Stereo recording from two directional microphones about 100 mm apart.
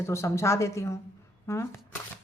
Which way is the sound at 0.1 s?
30° left (ahead or behind).